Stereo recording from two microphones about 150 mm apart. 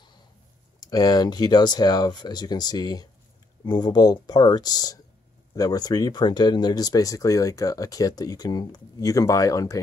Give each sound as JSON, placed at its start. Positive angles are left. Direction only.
{"t": 0.7, "sound": "speech", "side_deg": 25}